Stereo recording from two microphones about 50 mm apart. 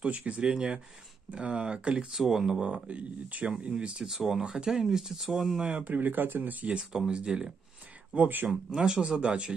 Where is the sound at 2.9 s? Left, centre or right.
Right; by 5.7 s centre.